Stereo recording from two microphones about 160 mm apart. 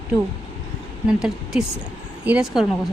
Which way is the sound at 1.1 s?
5° right (ahead or behind).